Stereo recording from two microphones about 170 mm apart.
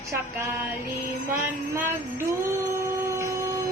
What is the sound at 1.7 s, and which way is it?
Music, 15° right (ahead or behind).